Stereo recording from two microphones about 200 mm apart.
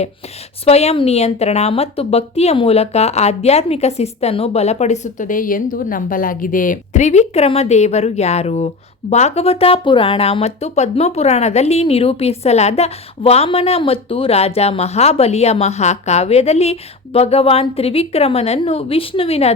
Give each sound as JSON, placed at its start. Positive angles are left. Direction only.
{"t": 0.6, "sound": "speech", "side_deg": 30}